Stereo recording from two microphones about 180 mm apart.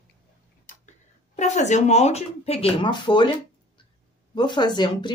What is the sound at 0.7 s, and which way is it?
Tick-tock, 50° left (ahead or behind).